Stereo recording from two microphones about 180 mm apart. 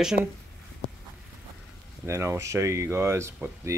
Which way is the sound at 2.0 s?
15° right (ahead or behind).